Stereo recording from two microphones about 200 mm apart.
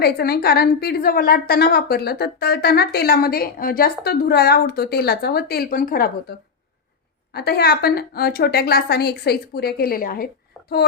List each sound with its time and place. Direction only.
0.0 s a woman's voice: 50° left (ahead or behind)
7.3 s a woman's voice: 55° left (ahead or behind)